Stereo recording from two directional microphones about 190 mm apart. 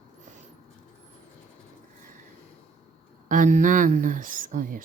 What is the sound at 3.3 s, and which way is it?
Speech, 45° right (ahead or behind).